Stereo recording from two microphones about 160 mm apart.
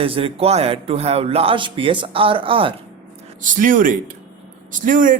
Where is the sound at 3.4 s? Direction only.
55° right (ahead or behind).